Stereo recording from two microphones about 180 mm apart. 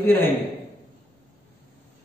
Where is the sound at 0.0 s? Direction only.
10° left (ahead or behind).